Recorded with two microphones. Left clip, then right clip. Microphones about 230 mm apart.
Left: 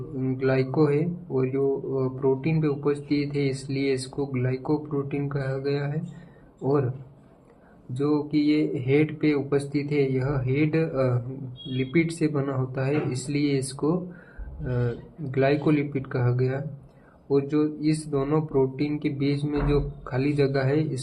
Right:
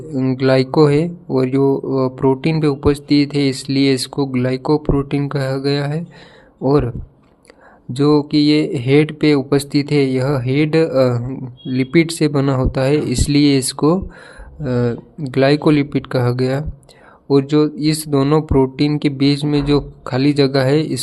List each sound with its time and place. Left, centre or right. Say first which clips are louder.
0.2 s speech: right 10 dB; right
7.9 s speech: right 10 dB; right